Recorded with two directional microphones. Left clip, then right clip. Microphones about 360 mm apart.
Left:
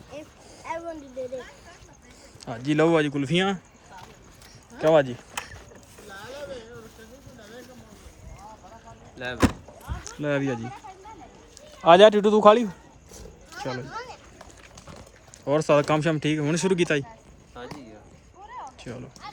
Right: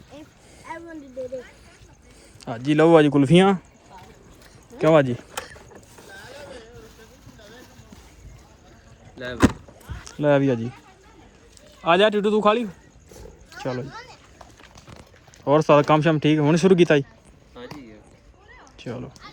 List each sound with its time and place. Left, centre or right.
2.4 s speech: centre
4.8 s speech: centre
9.1 s speech: centre
11.8 s speech: centre
13.8 s splash: left
15.4 s speech: centre
18.9 s speech: centre